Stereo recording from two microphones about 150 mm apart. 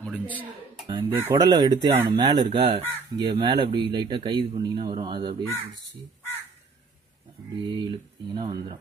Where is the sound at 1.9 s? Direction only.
15° right (ahead or behind).